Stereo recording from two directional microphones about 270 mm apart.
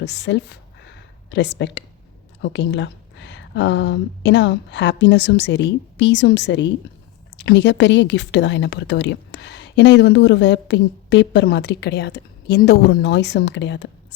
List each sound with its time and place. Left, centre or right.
0.0 s speech: left